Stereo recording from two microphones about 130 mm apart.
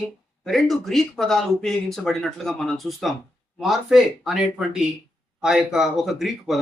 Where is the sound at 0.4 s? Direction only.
Centre (ahead or behind).